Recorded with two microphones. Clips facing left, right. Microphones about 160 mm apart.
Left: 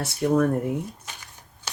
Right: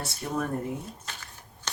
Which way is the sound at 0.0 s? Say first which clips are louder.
Left 10 dB; 70° left (ahead or behind).